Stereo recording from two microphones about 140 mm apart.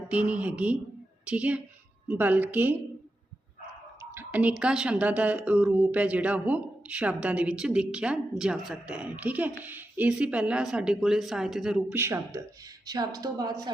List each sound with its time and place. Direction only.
0.1 s a woman's voice: 10° right (ahead or behind)
4.1 s speech: 15° right (ahead or behind)
11.9 s a woman's voice: 20° right (ahead or behind)